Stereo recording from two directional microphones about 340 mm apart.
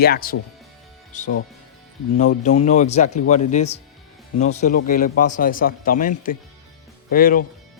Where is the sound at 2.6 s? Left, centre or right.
Centre.